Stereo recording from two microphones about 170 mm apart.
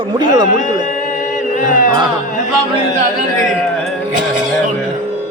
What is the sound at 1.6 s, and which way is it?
Music, 50° left (ahead or behind).